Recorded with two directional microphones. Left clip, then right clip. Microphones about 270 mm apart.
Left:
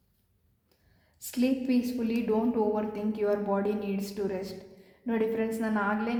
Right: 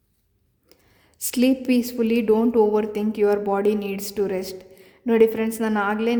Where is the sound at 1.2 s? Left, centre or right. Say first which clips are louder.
Right 8 dB; right.